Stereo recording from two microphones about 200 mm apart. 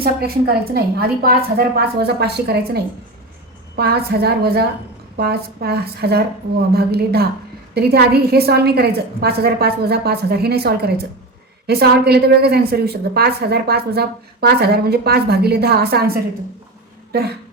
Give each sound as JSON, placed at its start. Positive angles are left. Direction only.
{"t": 0.0, "sound": "a woman's voice", "side_deg": -50}
{"t": 3.8, "sound": "a woman's voice", "side_deg": -55}